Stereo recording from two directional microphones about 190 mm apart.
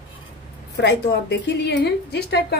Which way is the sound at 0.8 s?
65° left (ahead or behind).